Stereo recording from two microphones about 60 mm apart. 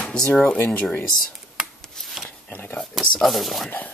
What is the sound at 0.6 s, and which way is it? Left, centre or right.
Speech, left.